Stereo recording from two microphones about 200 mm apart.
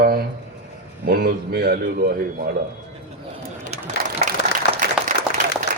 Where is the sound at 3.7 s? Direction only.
35° right (ahead or behind).